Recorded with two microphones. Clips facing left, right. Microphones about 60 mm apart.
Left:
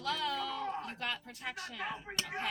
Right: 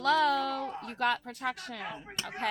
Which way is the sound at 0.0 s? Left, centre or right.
Right.